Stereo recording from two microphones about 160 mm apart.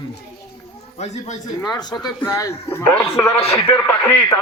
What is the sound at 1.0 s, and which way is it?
Speech, 45° left (ahead or behind).